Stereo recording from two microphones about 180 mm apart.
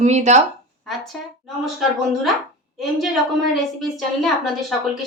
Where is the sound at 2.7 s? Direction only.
Centre (ahead or behind).